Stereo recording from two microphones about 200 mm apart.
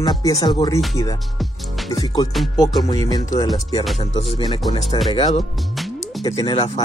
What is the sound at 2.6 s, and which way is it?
Speech, 15° left (ahead or behind).